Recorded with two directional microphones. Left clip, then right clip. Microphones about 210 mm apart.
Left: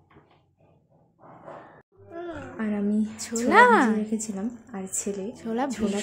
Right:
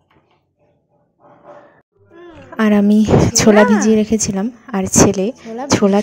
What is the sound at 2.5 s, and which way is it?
Speech, 45° right (ahead or behind).